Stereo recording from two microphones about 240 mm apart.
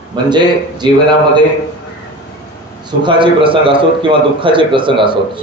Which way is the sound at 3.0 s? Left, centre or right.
Right.